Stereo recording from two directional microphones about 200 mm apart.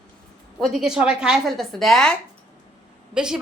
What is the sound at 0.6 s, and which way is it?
Speech, centre (ahead or behind).